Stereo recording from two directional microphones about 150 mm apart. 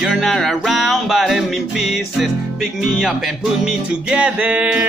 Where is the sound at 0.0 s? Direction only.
Centre (ahead or behind).